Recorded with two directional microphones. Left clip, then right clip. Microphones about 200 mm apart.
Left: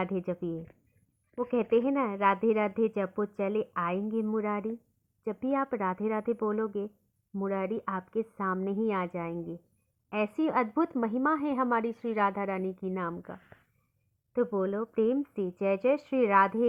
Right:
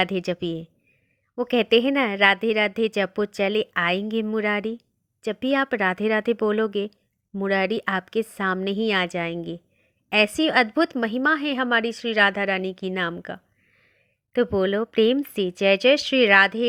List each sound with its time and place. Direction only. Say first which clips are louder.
0.0 s a woman's voice: right 9 dB; 50° right (ahead or behind)